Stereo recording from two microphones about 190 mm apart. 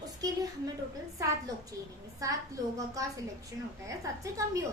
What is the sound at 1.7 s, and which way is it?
A woman's voice, 15° right (ahead or behind).